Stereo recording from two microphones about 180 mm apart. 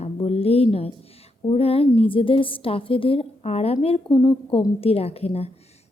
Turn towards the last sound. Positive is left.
turn(degrees=35)  # may be behind; listen again after turning